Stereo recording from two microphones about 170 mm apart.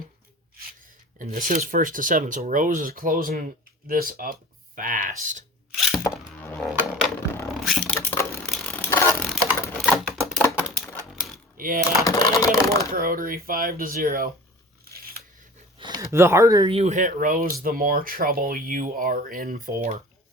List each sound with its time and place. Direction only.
1.2 s speech: 50° right (ahead or behind)
5.7 s a sound: centre (ahead or behind)
6.1 s music: 15° left (ahead or behind)
7.4 s a sound: centre (ahead or behind)
7.9 s a sound: 15° left (ahead or behind)
9.2 s sewing machine: centre (ahead or behind)
9.8 s typewriter: 5° left (ahead or behind)
11.5 s speech: 55° right (ahead or behind)
12.0 s speech: 20° left (ahead or behind)
12.9 s speech: 55° right (ahead or behind)
14.8 s a sound: 65° right (ahead or behind)
15.8 s speech: 20° right (ahead or behind)
16.7 s speech: 45° right (ahead or behind)